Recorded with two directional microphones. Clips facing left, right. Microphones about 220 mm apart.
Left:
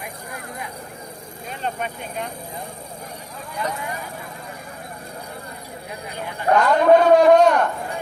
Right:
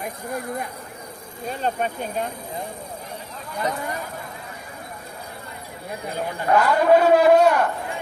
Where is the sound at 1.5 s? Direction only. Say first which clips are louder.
Right 4 dB; 40° right (ahead or behind).